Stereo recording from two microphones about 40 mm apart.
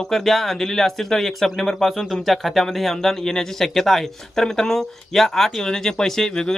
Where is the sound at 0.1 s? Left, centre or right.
Centre.